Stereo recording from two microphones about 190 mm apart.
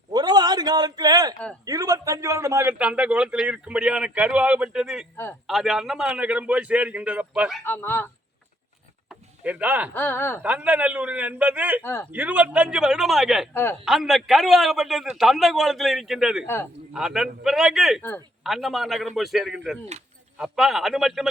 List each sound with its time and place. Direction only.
0.1 s a sound: 20° right (ahead or behind)
1.6 s a man's voice: 20° right (ahead or behind)
5.1 s a man's voice: 10° left (ahead or behind)
5.5 s a man's voice: centre (ahead or behind)
7.6 s speech: 10° left (ahead or behind)
9.0 s a sound: 10° right (ahead or behind)
9.9 s speech: 10° left (ahead or behind)
10.4 s a man's voice: 5° right (ahead or behind)
11.8 s speech: 15° left (ahead or behind)
12.1 s a man's voice: 10° right (ahead or behind)
13.5 s speech: 15° left (ahead or behind)
13.8 s a man's voice: centre (ahead or behind)